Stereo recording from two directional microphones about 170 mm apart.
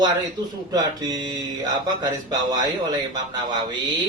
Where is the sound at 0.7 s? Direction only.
20° right (ahead or behind).